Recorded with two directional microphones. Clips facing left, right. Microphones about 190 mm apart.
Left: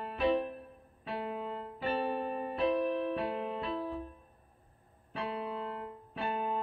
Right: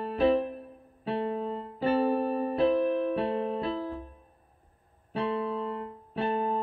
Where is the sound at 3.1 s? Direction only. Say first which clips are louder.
Right 6 dB; 35° right (ahead or behind).